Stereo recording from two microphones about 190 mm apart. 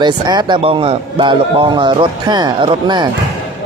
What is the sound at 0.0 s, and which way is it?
Speech, 25° right (ahead or behind).